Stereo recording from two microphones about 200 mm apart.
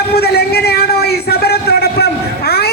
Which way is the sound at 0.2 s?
50° left (ahead or behind).